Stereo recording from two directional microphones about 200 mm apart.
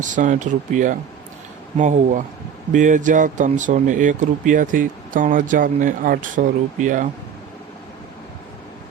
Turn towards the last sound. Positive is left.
turn(degrees=-40)  # may be behind; listen again after turning